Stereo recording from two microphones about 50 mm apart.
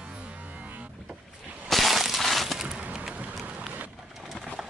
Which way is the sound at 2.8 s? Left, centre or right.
Right.